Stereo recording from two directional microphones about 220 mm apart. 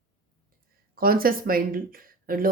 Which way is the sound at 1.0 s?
40° right (ahead or behind).